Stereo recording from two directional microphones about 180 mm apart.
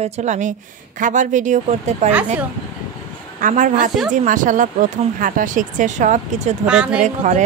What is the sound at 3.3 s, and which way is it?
A woman's voice, 45° right (ahead or behind).